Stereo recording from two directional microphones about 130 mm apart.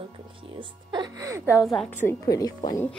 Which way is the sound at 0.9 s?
30° right (ahead or behind).